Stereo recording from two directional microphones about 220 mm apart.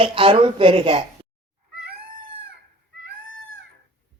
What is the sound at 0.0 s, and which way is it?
Speech, 25° right (ahead or behind).